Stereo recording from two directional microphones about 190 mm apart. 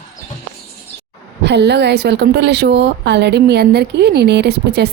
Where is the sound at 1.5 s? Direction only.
60° right (ahead or behind).